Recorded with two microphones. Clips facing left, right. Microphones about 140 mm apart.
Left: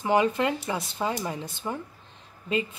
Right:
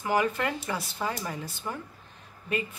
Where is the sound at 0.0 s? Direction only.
20° left (ahead or behind).